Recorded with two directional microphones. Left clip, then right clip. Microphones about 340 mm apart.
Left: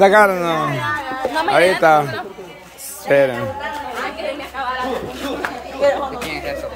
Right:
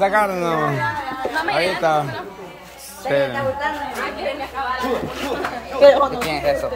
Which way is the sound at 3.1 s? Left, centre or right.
Centre.